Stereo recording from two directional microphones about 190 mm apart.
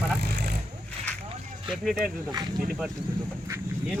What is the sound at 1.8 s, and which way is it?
Speech, centre (ahead or behind).